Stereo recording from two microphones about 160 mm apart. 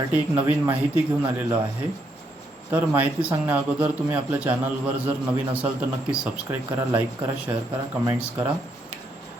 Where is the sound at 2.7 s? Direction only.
10° right (ahead or behind).